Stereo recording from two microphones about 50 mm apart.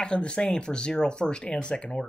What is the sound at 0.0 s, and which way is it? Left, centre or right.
Speech, centre.